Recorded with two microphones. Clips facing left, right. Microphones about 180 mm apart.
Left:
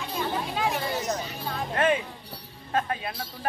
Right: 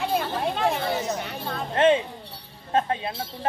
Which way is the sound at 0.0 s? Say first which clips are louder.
Right 4 dB; 60° right (ahead or behind).